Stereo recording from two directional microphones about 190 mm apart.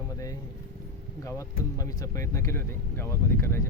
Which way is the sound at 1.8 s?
15° left (ahead or behind).